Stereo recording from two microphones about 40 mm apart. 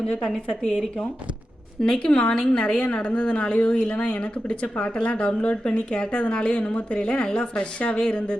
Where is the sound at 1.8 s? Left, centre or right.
Left.